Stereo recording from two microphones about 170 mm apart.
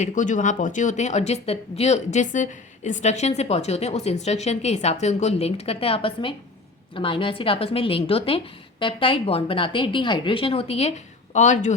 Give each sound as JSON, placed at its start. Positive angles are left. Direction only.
{"t": 0.0, "sound": "speech", "side_deg": 45}